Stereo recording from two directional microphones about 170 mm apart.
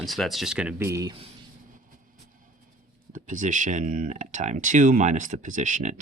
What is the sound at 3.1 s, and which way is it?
Speech, 50° right (ahead or behind).